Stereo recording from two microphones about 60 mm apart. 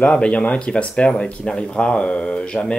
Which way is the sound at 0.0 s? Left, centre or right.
Centre.